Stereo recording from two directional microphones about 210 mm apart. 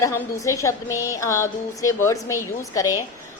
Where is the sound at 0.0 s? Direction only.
15° left (ahead or behind).